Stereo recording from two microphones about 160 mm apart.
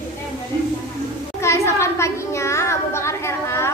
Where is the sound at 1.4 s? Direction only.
15° left (ahead or behind).